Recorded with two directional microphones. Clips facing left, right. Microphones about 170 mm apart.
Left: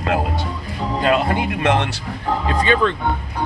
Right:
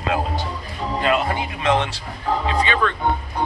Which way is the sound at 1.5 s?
65° left (ahead or behind).